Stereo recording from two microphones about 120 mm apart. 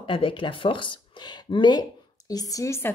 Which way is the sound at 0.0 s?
45° left (ahead or behind).